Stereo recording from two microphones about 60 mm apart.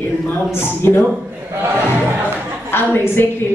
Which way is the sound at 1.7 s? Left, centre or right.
Right.